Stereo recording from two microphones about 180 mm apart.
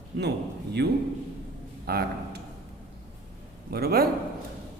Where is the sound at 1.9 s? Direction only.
60° right (ahead or behind).